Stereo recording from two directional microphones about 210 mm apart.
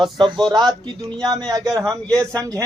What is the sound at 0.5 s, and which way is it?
A man's voice, 20° right (ahead or behind).